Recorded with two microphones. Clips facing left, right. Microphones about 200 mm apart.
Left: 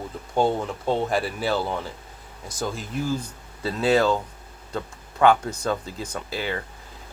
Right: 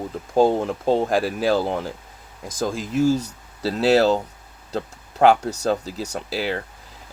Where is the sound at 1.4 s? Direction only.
45° right (ahead or behind).